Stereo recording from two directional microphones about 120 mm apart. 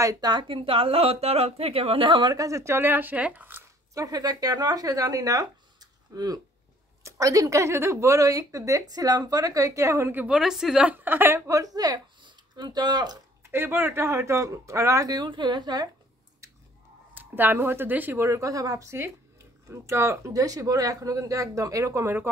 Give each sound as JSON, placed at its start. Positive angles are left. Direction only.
{"t": 0.0, "sound": "speech", "side_deg": -30}
{"t": 3.9, "sound": "a woman's voice", "side_deg": -30}
{"t": 10.2, "sound": "a woman's voice", "side_deg": -5}
{"t": 13.5, "sound": "a woman's voice", "side_deg": -20}
{"t": 17.1, "sound": "a woman's voice", "side_deg": -15}